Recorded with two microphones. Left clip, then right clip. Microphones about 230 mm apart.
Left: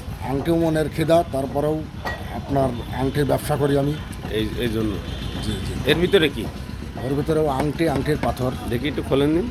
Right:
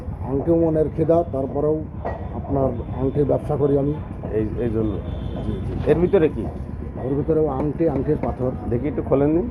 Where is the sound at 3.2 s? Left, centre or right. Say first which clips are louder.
Even; left.